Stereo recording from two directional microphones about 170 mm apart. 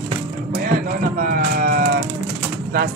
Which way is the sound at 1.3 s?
55° right (ahead or behind).